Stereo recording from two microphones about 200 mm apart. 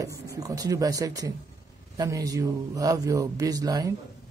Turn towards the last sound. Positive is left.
turn(degrees=-20)  # may be behind; listen again after turning